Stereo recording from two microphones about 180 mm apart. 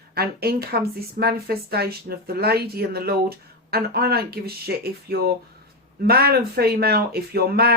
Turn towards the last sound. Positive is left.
turn(degrees=-60)  # may be behind; listen again after turning